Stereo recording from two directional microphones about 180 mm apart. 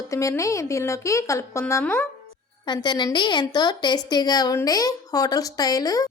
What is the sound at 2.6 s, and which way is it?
A woman's voice, 25° left (ahead or behind).